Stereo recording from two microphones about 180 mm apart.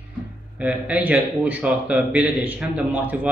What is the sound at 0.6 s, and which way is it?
A man's voice, 10° right (ahead or behind).